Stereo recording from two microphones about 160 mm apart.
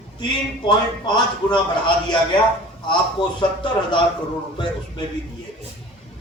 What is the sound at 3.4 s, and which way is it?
Speech, 30° left (ahead or behind).